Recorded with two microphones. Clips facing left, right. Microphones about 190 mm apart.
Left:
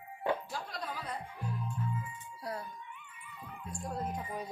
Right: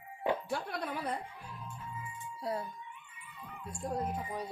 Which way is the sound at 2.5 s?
25° right (ahead or behind).